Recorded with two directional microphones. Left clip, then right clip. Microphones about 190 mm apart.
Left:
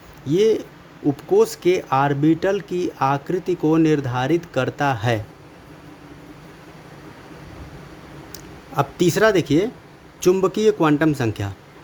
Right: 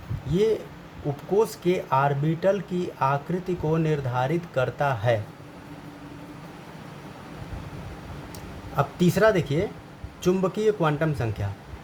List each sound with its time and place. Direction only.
0.3 s a man's voice: 40° left (ahead or behind)
8.7 s a man's voice: 40° left (ahead or behind)